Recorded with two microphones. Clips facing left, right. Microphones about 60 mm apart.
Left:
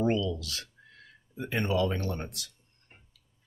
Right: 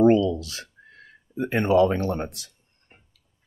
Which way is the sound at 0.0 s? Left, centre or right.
Right.